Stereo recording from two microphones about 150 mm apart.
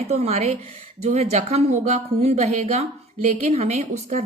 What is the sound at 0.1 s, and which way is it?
A woman's voice, 45° right (ahead or behind).